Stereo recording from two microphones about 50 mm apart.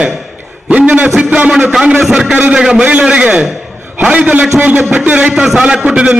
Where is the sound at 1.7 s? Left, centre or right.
Centre.